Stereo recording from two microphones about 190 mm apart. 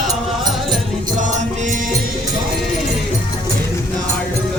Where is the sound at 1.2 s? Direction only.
40° right (ahead or behind).